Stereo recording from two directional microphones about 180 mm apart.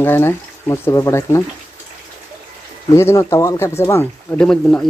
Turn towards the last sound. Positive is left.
turn(degrees=5)  # may be behind; listen again after turning